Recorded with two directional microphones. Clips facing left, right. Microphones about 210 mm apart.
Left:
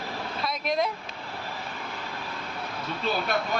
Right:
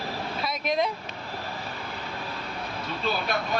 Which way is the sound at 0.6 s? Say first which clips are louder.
Right 1 dB; centre (ahead or behind).